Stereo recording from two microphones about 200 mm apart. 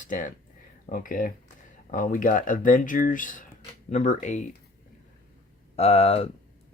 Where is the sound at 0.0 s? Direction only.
40° left (ahead or behind).